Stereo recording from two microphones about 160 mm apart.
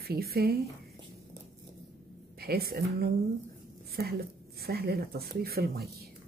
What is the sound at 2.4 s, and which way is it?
Speech, 75° right (ahead or behind).